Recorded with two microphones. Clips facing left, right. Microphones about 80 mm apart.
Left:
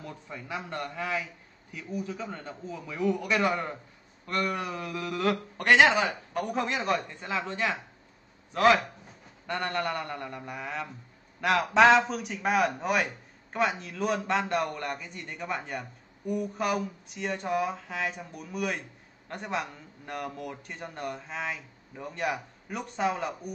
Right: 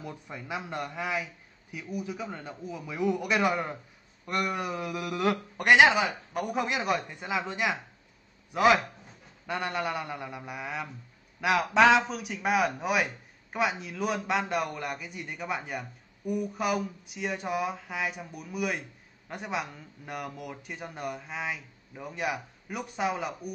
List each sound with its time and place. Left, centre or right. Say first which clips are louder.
0.0 s a man's voice: right 1 dB; centre
5.9 s a man's voice: even; centre